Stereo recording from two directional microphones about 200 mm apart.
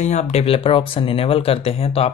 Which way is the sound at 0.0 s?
35° left (ahead or behind).